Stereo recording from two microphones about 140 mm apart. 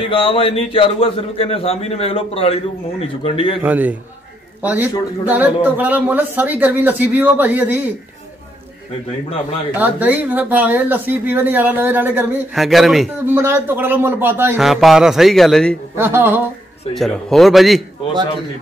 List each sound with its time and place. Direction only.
0.0 s a man's voice: 40° left (ahead or behind)
3.6 s speech: 10° right (ahead or behind)
9.8 s speech: 10° right (ahead or behind)
12.5 s speech: centre (ahead or behind)
13.3 s speech: 20° right (ahead or behind)
14.6 s speech: centre (ahead or behind)
16.0 s speech: 15° right (ahead or behind)
16.9 s speech: centre (ahead or behind)